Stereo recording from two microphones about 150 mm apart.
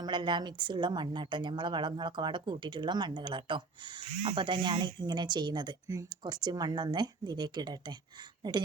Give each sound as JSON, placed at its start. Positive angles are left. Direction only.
{"t": 0.0, "sound": "a woman's voice", "side_deg": -30}